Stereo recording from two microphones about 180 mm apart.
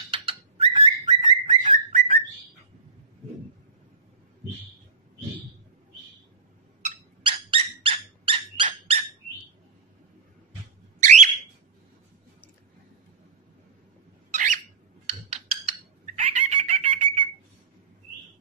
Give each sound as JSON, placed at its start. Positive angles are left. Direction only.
{"t": 0.1, "sound": "bird", "side_deg": -30}
{"t": 6.8, "sound": "dog", "side_deg": -30}
{"t": 11.0, "sound": "alarm", "side_deg": -40}
{"t": 14.3, "sound": "cat", "side_deg": -45}
{"t": 15.0, "sound": "a sound", "side_deg": -35}
{"t": 16.2, "sound": "chicken", "side_deg": -35}